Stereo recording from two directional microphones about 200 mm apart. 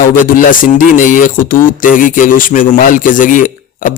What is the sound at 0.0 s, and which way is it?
A man's voice, 40° left (ahead or behind).